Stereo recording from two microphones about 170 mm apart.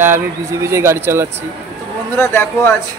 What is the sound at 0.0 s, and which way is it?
Speech, 15° right (ahead or behind).